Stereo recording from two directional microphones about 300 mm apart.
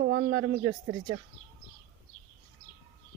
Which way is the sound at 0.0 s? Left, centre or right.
Right.